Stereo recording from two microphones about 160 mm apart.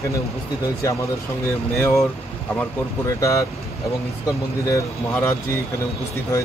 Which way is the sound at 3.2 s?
20° left (ahead or behind).